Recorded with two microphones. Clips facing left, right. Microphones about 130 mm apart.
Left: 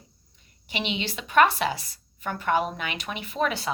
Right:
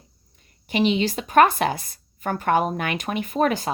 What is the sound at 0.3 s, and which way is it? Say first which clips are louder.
A woman's voice: right 10 dB; 45° right (ahead or behind).